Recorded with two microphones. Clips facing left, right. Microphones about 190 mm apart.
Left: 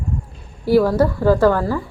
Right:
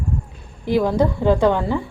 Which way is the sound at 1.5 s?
20° right (ahead or behind).